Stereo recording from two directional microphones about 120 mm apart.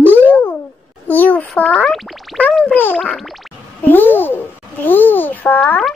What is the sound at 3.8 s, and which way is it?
Babbling, 15° left (ahead or behind).